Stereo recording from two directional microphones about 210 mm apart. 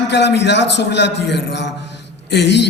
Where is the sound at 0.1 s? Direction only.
55° left (ahead or behind).